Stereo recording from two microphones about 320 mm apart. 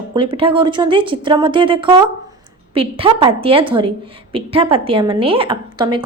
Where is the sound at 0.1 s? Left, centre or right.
Centre.